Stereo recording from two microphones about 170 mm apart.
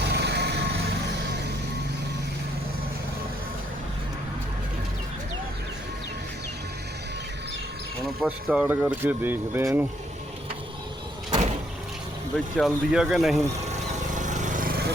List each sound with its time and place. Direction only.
0.0 s vehicle: 75° right (ahead or behind)
8.2 s speech: 5° right (ahead or behind)
12.5 s speech: centre (ahead or behind)
13.7 s a sound: 45° right (ahead or behind); by 14.9 s 65° right (ahead or behind)